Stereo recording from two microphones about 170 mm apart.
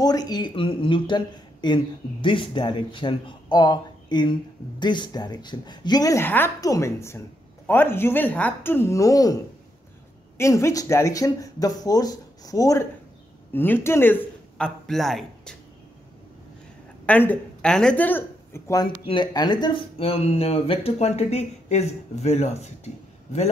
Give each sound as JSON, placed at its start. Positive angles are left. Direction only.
{"t": 0.0, "sound": "speech", "side_deg": 20}
{"t": 14.9, "sound": "speech", "side_deg": 0}
{"t": 17.0, "sound": "speech", "side_deg": 10}